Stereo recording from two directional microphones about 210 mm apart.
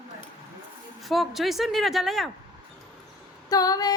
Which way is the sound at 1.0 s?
Centre (ahead or behind).